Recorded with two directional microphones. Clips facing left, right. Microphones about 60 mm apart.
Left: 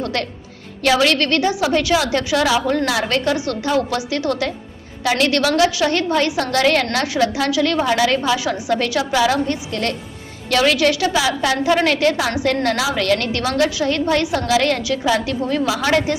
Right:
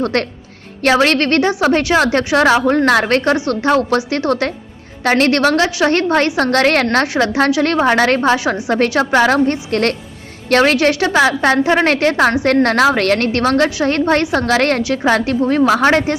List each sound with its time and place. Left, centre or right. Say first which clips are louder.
0.0 s a woman's voice: right 6 dB; right